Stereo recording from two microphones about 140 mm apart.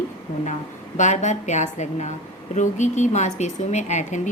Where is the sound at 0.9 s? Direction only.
60° left (ahead or behind).